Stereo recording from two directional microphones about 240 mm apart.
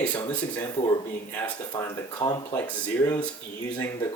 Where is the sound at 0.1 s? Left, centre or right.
Centre.